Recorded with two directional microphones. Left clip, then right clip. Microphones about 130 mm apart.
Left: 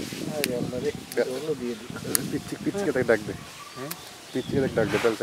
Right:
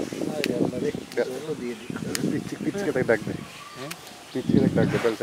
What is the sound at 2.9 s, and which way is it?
Speech, centre (ahead or behind).